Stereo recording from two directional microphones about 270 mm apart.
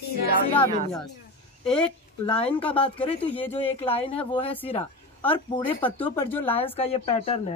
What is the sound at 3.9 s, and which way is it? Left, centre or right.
Speech, left.